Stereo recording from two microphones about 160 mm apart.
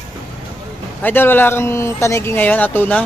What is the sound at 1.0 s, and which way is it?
Speech, 15° left (ahead or behind).